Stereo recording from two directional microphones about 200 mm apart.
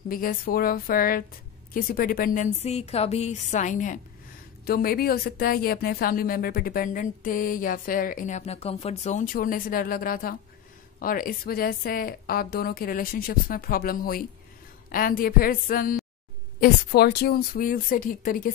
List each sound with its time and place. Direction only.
0.1 s a woman's voice: 45° left (ahead or behind)